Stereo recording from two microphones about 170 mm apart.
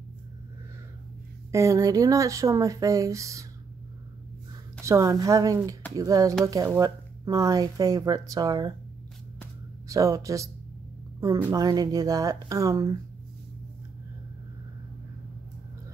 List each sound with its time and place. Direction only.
1.5 s speech: 20° right (ahead or behind)
4.8 s speech: 15° right (ahead or behind)
9.8 s speech: 20° right (ahead or behind)